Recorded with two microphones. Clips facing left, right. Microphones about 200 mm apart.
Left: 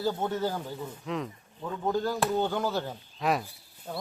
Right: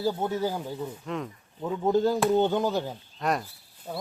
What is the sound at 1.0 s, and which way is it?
Speech, centre (ahead or behind).